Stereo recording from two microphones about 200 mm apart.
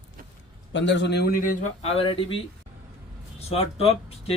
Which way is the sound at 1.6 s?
30° left (ahead or behind).